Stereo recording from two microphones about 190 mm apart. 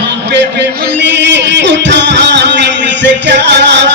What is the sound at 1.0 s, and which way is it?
Music, 70° right (ahead or behind).